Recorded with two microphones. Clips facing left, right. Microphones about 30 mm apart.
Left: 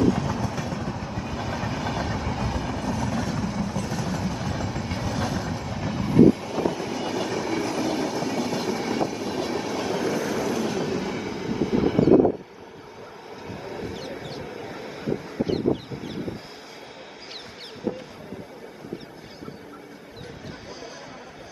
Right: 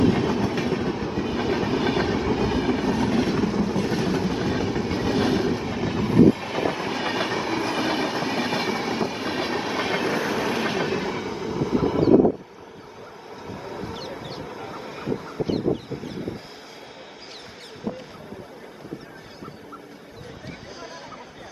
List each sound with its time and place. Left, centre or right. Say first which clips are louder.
0.0 s train: right 3 dB; right
3.4 s vehicle: right 5 dB; right
4.2 s train: right 5 dB; right
5.0 s train: right 7 dB; right; by 6.4 s centre
6.4 s train: right 1 dB; right
9.1 s train: right 1 dB; right
11.1 s train: right 1 dB; centre
11.3 s train: left 1 dB; centre
13.5 s vehicle: even; centre
14.1 s a sound: even; centre
17.9 s boat: left 2 dB; centre